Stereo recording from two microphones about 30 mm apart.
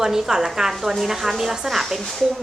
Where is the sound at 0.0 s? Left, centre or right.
Centre.